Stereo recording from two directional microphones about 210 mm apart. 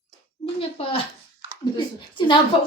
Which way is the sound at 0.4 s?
25° left (ahead or behind).